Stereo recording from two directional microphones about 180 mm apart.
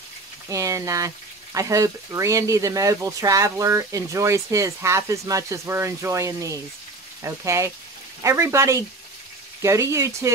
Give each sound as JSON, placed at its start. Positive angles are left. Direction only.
{"t": 0.5, "sound": "speech", "side_deg": -20}